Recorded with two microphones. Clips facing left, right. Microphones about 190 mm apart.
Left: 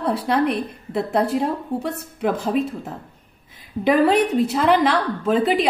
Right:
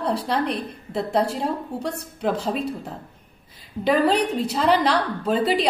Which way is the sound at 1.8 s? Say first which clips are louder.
Even; centre (ahead or behind).